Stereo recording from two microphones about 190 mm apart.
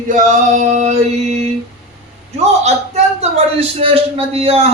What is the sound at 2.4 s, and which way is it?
A man's voice, 35° right (ahead or behind).